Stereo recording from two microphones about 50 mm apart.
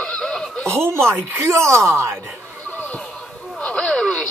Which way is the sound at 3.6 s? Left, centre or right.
Centre.